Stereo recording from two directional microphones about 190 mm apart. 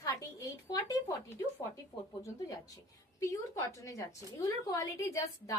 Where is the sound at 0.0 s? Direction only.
15° left (ahead or behind).